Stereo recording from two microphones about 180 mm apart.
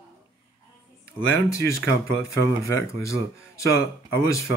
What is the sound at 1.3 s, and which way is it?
Speech, 15° left (ahead or behind).